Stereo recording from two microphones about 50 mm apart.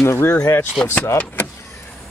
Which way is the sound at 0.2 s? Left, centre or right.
Left.